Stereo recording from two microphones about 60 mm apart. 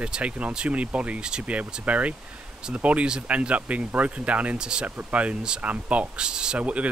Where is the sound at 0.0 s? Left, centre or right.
Right.